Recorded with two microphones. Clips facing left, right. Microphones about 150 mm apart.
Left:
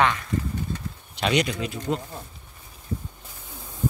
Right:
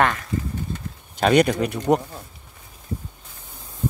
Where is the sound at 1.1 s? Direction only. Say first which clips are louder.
Right 7 dB; 50° right (ahead or behind); by 2.0 s 65° right (ahead or behind).